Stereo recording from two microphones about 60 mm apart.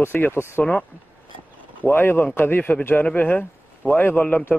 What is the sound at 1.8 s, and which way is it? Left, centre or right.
Speech, left.